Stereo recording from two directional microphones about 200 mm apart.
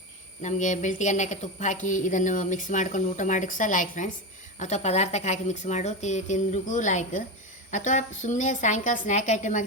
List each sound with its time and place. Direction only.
0.4 s a woman's voice: 35° left (ahead or behind)